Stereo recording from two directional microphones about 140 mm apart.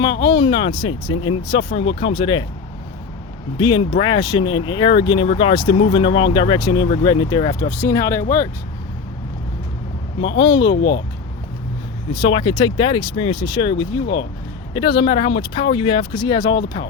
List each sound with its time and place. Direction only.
0.0 s speech: 35° left (ahead or behind)
3.6 s speech: 35° left (ahead or behind)
7.8 s speech: 20° left (ahead or behind)
10.2 s speech: 35° left (ahead or behind)
12.3 s speech: 35° left (ahead or behind)